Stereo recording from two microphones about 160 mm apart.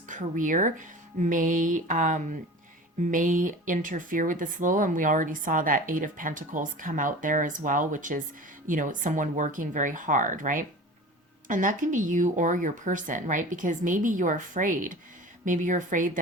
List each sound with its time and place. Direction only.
0.1 s speech: 55° right (ahead or behind)